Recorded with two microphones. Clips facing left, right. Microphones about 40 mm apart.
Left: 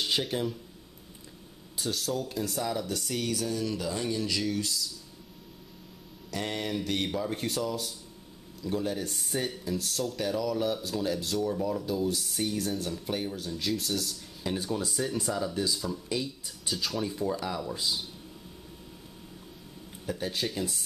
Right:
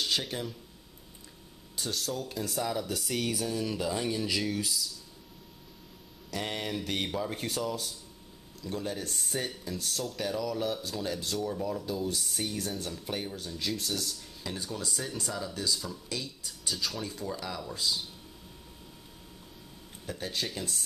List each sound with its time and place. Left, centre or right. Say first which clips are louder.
0.0 s speech: left 3 dB; centre
1.8 s speech: left 3 dB; centre
6.3 s speech: left 2 dB; centre
14.4 s speech: left 6 dB; left
20.1 s speech: left 3 dB; centre